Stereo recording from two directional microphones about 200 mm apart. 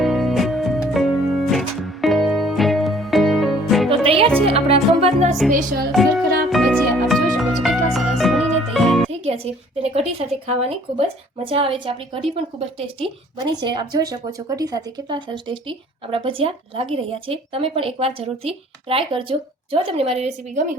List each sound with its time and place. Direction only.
0.0 s music: centre (ahead or behind)
3.8 s music: 25° right (ahead or behind)
5.9 s music: centre (ahead or behind)
9.2 s a woman's voice: 30° right (ahead or behind)